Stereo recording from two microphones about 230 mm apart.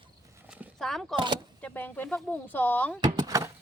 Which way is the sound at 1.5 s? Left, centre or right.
Centre.